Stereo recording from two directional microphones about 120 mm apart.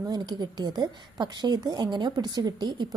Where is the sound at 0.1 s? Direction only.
35° right (ahead or behind).